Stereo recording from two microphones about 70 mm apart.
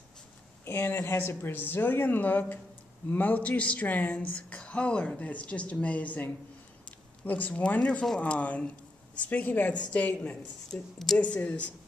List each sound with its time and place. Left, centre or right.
0.7 s speech: left
10.7 s speech: centre
11.1 s speech: centre